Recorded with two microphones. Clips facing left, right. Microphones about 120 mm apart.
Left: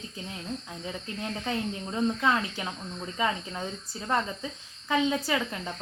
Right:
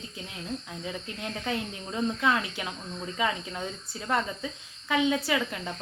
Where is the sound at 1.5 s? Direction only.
25° left (ahead or behind).